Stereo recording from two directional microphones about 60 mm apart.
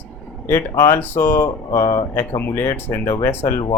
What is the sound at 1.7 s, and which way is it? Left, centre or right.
Speech, left.